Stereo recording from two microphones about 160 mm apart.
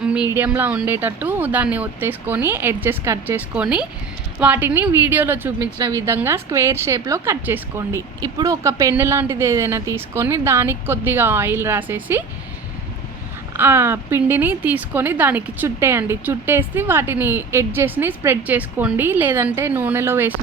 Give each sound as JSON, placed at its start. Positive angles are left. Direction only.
{"t": 0.0, "sound": "a sound", "side_deg": -5}
{"t": 0.3, "sound": "a woman's voice", "side_deg": -10}
{"t": 13.5, "sound": "a woman's voice", "side_deg": -15}